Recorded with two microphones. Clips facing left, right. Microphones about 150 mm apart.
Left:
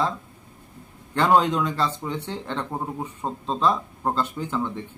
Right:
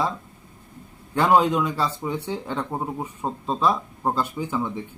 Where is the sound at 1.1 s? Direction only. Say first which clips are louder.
Right 1 dB; 10° right (ahead or behind).